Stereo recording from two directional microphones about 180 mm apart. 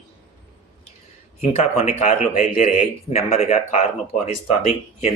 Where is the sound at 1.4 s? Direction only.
35° left (ahead or behind).